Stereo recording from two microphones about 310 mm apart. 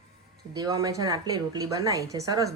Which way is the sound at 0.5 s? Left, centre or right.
Centre.